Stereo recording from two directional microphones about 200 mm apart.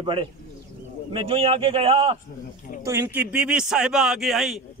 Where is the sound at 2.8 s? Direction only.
10° right (ahead or behind).